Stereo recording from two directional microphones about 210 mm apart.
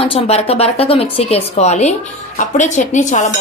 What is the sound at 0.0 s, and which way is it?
A woman's voice, 25° left (ahead or behind).